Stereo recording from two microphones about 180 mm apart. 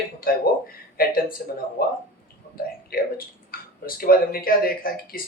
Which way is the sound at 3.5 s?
55° left (ahead or behind).